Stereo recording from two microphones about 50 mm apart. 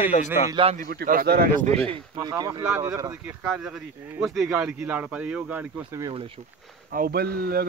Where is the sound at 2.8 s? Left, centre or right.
Right.